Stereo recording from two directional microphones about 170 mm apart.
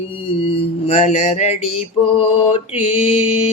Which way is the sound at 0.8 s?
40° left (ahead or behind).